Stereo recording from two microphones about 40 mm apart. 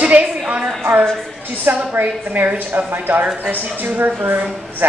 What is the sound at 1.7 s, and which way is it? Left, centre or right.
Speech, right.